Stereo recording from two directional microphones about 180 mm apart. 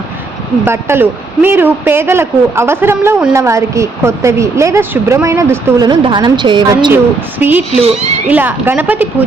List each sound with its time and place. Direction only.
0.6 s a woman's voice: 15° right (ahead or behind)
6.9 s a woman's voice: 10° right (ahead or behind)